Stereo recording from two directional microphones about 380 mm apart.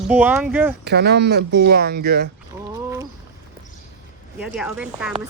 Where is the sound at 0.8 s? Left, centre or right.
Right.